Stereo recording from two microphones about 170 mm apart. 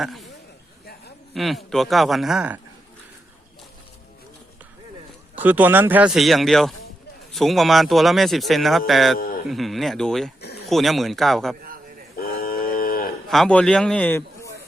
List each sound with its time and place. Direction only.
0.0 s speech: centre (ahead or behind)
1.3 s speech: centre (ahead or behind)
5.3 s speech: 10° right (ahead or behind)
9.1 s a sound: 55° left (ahead or behind)
9.5 s speech: centre (ahead or behind)
12.1 s a sound: 60° left (ahead or behind)
13.2 s a man's voice: centre (ahead or behind)